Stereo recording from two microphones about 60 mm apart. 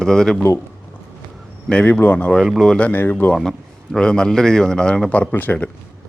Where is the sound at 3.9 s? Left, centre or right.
Centre.